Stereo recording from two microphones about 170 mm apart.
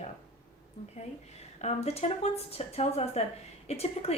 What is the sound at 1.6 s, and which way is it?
Speech, 40° left (ahead or behind).